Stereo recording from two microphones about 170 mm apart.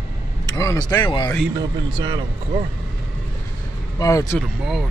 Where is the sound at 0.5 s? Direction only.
20° left (ahead or behind).